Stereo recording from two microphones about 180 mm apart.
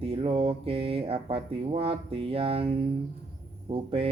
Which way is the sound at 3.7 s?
30° right (ahead or behind).